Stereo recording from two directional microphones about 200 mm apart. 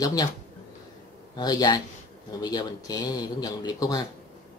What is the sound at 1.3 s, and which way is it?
Speech, 20° left (ahead or behind).